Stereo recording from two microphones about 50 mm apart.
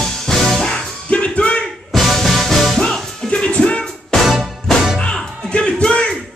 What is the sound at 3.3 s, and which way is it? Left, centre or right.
Music, left.